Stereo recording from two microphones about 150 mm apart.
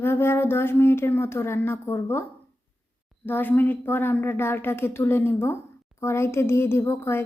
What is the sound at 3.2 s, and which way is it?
A woman's voice, 15° left (ahead or behind).